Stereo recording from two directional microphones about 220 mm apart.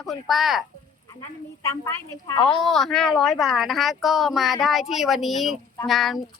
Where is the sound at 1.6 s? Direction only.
15° left (ahead or behind).